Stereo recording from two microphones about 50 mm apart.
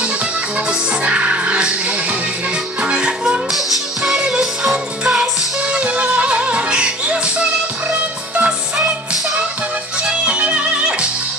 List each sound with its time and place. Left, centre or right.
0.7 s music: right
3.5 s music: centre
5.8 s music: right
10.0 s music: right